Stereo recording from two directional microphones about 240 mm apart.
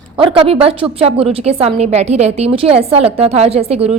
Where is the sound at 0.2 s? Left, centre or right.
Right.